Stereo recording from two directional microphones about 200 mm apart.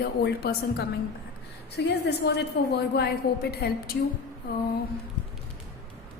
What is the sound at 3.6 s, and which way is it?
Speech, 50° left (ahead or behind).